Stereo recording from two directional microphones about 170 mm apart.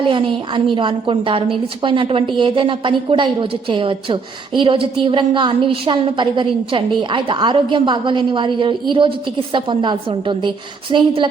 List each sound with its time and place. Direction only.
0.0 s a woman's voice: 30° right (ahead or behind)